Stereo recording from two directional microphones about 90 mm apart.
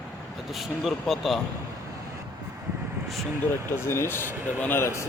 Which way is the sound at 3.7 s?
30° left (ahead or behind).